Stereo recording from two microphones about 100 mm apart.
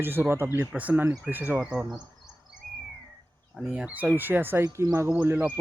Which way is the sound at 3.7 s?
15° right (ahead or behind).